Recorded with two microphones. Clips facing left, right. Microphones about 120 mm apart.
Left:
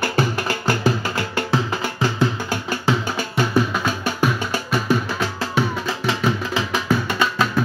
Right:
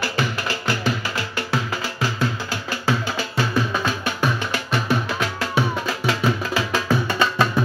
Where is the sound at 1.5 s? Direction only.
25° left (ahead or behind).